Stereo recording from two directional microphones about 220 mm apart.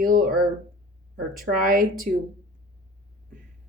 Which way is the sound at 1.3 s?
40° right (ahead or behind).